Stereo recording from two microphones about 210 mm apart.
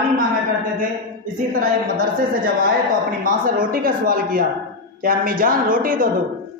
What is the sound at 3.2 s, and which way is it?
Speech, 40° right (ahead or behind).